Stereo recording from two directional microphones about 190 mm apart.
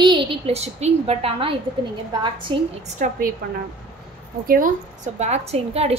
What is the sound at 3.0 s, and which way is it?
Speech, 40° right (ahead or behind).